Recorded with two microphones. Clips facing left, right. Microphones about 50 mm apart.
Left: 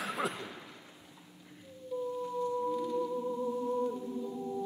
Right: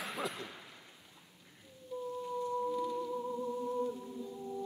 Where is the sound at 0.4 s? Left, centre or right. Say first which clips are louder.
Left 2 dB; centre.